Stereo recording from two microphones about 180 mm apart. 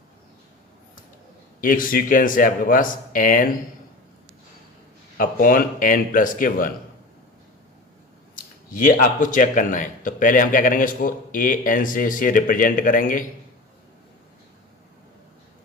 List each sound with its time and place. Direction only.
1.6 s speech: 50° left (ahead or behind)
5.1 s speech: 50° left (ahead or behind)
8.7 s speech: 50° left (ahead or behind)